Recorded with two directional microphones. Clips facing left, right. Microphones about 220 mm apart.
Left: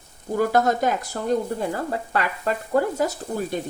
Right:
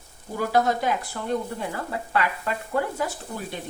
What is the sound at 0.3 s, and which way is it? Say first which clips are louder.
Speech: left 3 dB; 50° left (ahead or behind).